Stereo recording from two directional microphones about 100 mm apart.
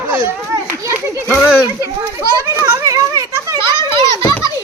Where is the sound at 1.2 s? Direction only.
20° left (ahead or behind).